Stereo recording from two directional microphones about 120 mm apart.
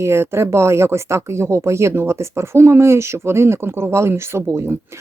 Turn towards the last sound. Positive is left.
turn(degrees=-20)  # may be behind; listen again after turning